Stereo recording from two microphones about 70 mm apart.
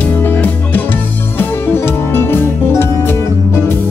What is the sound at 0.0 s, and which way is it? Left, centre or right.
Music, left.